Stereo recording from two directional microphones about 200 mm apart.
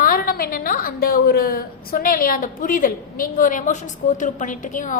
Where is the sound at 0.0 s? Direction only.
45° left (ahead or behind).